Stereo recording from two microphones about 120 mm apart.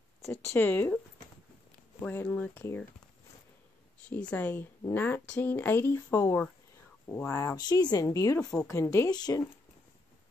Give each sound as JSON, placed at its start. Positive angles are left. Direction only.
{"t": 0.5, "sound": "speech", "side_deg": 15}
{"t": 2.0, "sound": "speech", "side_deg": 15}
{"t": 4.3, "sound": "speech", "side_deg": 15}
{"t": 7.5, "sound": "speech", "side_deg": 35}
{"t": 8.4, "sound": "speech", "side_deg": 5}
{"t": 8.6, "sound": "speech", "side_deg": 25}
{"t": 9.1, "sound": "speech", "side_deg": 35}